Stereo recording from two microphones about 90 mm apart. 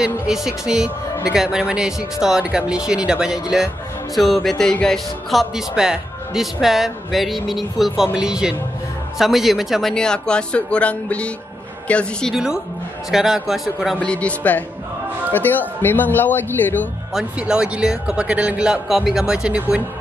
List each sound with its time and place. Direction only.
0.0 s speech: 5° right (ahead or behind)
12.4 s speech: 5° right (ahead or behind)
13.9 s speech: 15° left (ahead or behind)
17.1 s speech: 5° right (ahead or behind)